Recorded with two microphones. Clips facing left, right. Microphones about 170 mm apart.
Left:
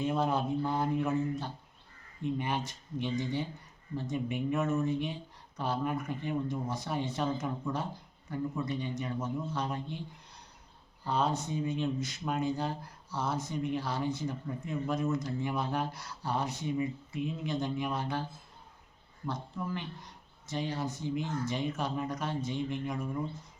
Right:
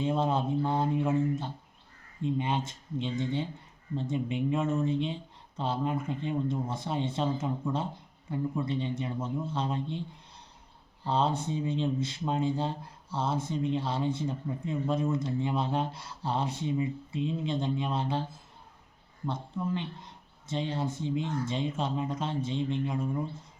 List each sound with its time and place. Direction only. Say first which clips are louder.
0.0 s speech: right 2 dB; 25° right (ahead or behind)
11.0 s speech: right 2 dB; 25° right (ahead or behind)
19.2 s speech: right 3 dB; 25° right (ahead or behind)